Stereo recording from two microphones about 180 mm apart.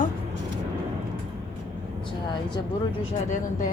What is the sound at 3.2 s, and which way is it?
Speech, 45° left (ahead or behind).